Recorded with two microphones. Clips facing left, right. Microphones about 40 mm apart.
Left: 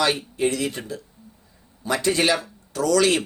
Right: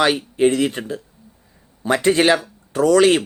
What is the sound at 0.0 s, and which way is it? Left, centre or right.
Speech, right.